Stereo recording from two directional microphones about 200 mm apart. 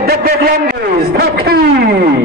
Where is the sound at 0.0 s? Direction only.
50° right (ahead or behind).